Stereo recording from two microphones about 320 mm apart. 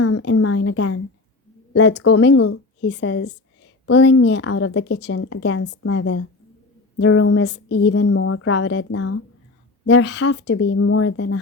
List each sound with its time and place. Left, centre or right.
0.0 s a sound: left
1.7 s a woman's voice: left
2.1 s a woman's voice: left